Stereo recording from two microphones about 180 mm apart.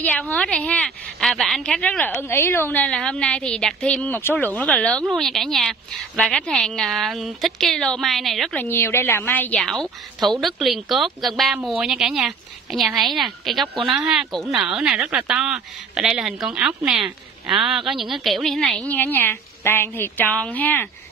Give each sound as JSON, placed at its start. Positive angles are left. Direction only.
{"t": 0.0, "sound": "a woman's voice", "side_deg": 10}
{"t": 8.6, "sound": "a woman's voice", "side_deg": 15}